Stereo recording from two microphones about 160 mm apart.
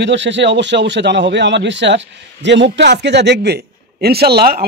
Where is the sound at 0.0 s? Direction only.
90° right.